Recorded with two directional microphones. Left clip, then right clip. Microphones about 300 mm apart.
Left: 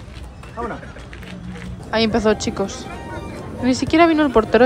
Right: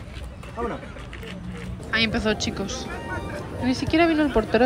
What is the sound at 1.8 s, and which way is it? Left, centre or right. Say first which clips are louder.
Speech: left 6 dB; centre.